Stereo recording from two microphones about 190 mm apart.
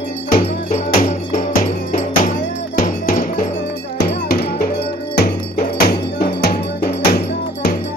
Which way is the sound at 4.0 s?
55° left (ahead or behind).